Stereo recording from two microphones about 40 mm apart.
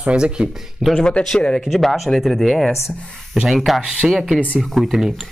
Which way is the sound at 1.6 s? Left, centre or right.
Centre.